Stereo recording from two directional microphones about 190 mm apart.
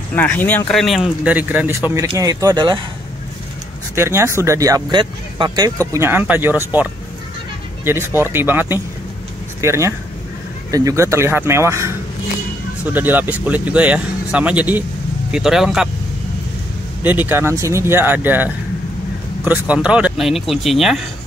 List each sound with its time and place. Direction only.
0.1 s speech: 10° left (ahead or behind); by 2.8 s 25° right (ahead or behind)
3.9 s speech: 15° right (ahead or behind)
17.0 s speech: 10° right (ahead or behind)